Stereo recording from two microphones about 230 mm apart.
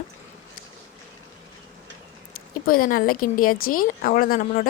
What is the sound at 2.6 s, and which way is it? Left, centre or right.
Speech, left.